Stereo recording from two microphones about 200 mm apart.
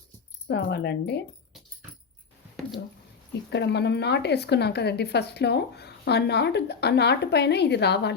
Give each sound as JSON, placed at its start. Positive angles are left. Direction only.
{"t": 0.4, "sound": "a woman's voice", "side_deg": 55}
{"t": 3.5, "sound": "a woman's voice", "side_deg": 55}